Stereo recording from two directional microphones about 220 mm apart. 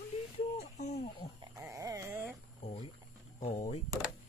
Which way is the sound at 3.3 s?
35° left (ahead or behind).